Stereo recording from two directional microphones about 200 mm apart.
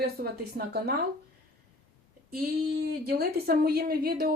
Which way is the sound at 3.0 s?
50° right (ahead or behind).